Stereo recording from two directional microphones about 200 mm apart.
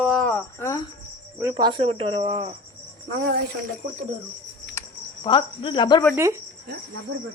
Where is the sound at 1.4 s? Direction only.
20° right (ahead or behind).